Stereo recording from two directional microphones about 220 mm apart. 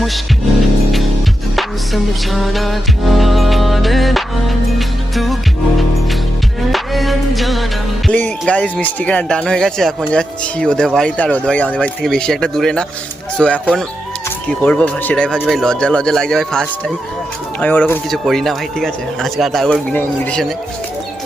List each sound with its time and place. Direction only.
1.5 s music: centre (ahead or behind)
6.7 s music: centre (ahead or behind)
8.0 s speech: 5° left (ahead or behind)